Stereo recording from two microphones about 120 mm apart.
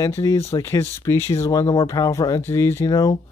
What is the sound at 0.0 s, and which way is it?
Speech, 30° left (ahead or behind).